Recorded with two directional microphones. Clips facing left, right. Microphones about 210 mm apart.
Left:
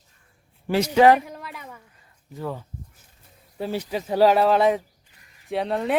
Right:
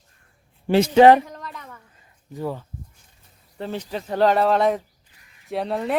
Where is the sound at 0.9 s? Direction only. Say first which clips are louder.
Right 3 dB; 25° right (ahead or behind).